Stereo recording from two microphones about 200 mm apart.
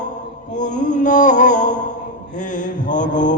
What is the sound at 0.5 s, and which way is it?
Mantra, 40° left (ahead or behind).